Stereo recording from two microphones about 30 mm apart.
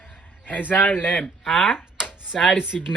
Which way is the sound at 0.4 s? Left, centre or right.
Left.